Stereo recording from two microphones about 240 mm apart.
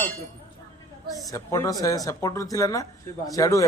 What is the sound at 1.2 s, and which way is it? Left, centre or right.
A man's voice, centre.